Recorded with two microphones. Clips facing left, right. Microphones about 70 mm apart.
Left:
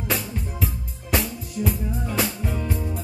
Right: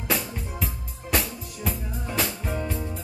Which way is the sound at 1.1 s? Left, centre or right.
Centre.